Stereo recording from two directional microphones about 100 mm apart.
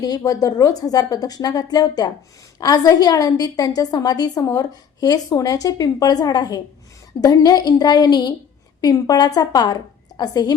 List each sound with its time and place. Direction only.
0.0 s a woman's voice: 40° left (ahead or behind)